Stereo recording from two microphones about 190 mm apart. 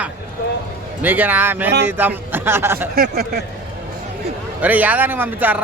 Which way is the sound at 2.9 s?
50° right (ahead or behind).